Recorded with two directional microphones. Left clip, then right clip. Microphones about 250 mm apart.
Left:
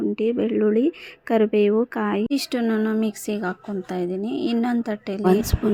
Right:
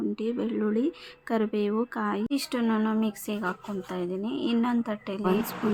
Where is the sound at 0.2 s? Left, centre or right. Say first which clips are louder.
Left 9 dB; centre.